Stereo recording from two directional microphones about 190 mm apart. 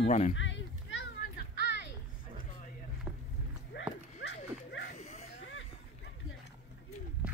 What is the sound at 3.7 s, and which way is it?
Clip-clop, 65° left (ahead or behind).